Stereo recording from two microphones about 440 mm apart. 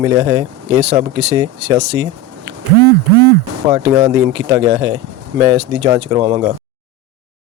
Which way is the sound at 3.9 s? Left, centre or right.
Centre.